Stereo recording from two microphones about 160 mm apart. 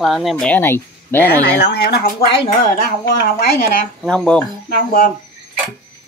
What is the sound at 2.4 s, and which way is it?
Speech, 60° left (ahead or behind).